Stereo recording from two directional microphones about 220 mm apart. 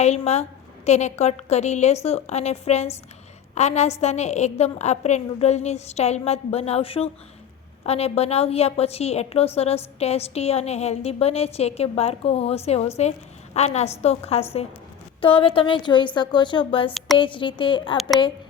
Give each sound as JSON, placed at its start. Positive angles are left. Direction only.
{"t": 0.0, "sound": "a woman's voice", "side_deg": 30}
{"t": 15.2, "sound": "a woman's voice", "side_deg": 25}